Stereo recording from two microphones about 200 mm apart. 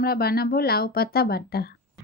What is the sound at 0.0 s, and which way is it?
Speech, 50° left (ahead or behind).